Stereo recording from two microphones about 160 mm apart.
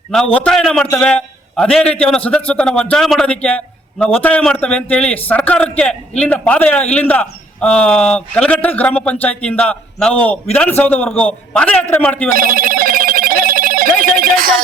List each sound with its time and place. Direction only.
0.3 s a man's voice: 5° left (ahead or behind)
12.3 s telephone bell ringing: 60° right (ahead or behind)